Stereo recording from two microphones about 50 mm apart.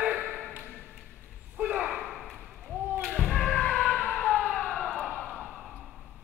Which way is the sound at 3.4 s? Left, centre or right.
Left.